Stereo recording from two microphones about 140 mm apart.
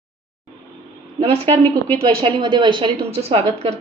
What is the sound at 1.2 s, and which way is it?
A woman's voice, 45° right (ahead or behind).